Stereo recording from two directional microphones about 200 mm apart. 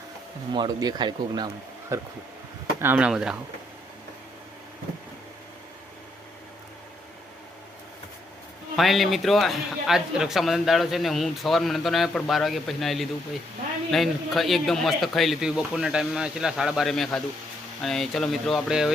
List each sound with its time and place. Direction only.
0.5 s a man's voice: 20° right (ahead or behind); by 3.3 s 5° right (ahead or behind)
8.7 s a man's voice: centre (ahead or behind)